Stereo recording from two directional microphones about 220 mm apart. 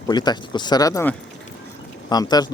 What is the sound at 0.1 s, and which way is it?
Speech, 20° left (ahead or behind).